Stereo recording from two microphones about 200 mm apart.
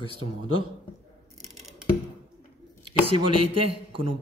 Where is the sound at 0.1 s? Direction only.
90° right.